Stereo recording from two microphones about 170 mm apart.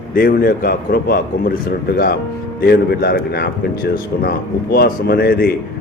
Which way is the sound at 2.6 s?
70° left (ahead or behind).